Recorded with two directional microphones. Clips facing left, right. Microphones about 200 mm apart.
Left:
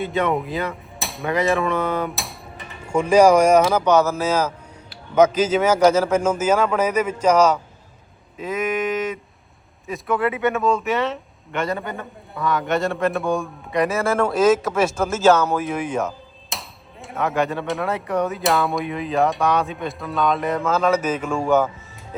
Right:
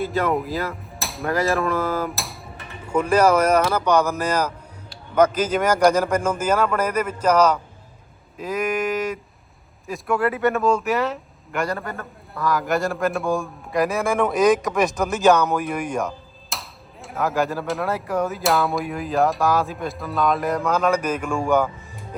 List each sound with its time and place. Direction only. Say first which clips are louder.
0.0 s speech: even; centre (ahead or behind)
2.9 s speech: left 3 dB; 10° left (ahead or behind)
3.8 s speech: left 2 dB; 15° right (ahead or behind)
6.1 s speech: left 3 dB; 5° left (ahead or behind)
6.4 s speech: left 2 dB; 10° right (ahead or behind)
7.3 s speech: left 1 dB; 10° left (ahead or behind)
14.0 s speech: left 1 dB; 15° right (ahead or behind)
16.0 s speech: left 1 dB; centre (ahead or behind)
20.7 s speech: left 2 dB; 10° right (ahead or behind)
21.2 s speech: left 1 dB; centre (ahead or behind)